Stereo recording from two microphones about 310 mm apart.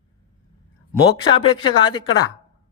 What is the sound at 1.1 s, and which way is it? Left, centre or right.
Speech, centre.